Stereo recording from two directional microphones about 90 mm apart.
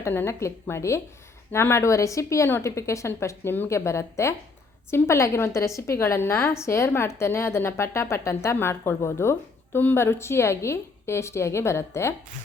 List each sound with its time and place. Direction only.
0.0 s a woman's voice: 25° left (ahead or behind)